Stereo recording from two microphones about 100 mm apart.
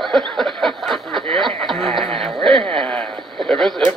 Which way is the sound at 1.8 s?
Centre (ahead or behind).